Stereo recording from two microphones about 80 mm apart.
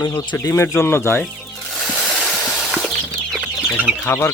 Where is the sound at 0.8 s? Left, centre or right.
Left.